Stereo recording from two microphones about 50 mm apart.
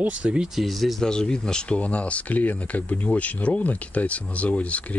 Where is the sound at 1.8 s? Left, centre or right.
Left.